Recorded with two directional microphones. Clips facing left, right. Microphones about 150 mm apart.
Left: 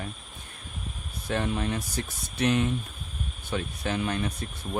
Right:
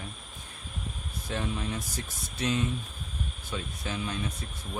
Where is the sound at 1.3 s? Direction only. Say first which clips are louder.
Left 5 dB; 60° left (ahead or behind).